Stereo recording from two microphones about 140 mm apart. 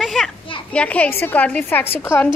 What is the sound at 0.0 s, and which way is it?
Children playing, centre (ahead or behind).